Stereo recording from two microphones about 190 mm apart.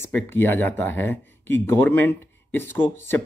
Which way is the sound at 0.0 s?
10° left (ahead or behind).